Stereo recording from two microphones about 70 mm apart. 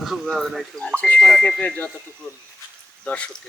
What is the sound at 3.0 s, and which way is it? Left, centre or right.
Speech, centre.